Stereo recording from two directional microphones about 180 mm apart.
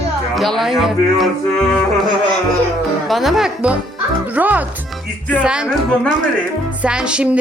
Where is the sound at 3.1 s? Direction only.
Centre (ahead or behind).